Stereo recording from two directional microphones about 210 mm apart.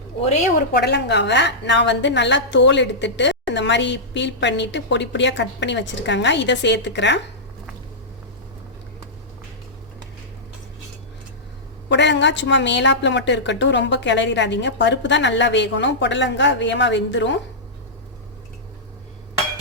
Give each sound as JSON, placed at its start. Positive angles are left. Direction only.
{"t": 0.2, "sound": "a woman's voice", "side_deg": 35}
{"t": 0.7, "sound": "a woman's voice", "side_deg": 50}
{"t": 11.9, "sound": "a woman's voice", "side_deg": 55}